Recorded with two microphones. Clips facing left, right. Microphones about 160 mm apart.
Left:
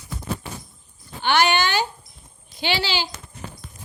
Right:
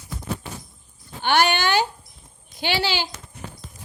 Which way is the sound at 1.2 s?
50° right (ahead or behind).